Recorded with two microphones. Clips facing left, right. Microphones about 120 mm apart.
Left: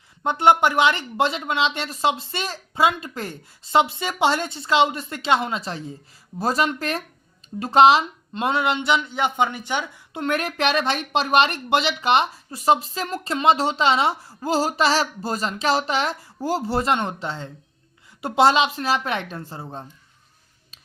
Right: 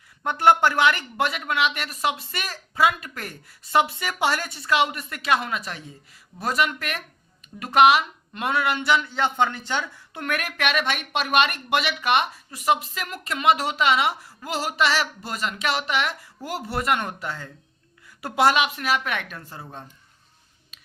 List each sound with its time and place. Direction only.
0.2 s speech: 20° left (ahead or behind)